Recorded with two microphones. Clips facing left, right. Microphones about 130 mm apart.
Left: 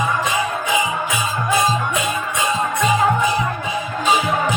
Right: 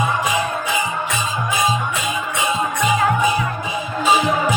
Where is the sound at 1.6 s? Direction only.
Centre (ahead or behind).